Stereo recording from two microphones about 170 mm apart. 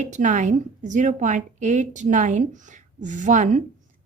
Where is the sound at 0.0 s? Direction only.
45° right (ahead or behind).